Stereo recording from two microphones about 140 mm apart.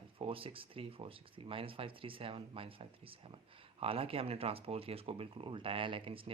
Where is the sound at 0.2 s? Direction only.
40° right (ahead or behind).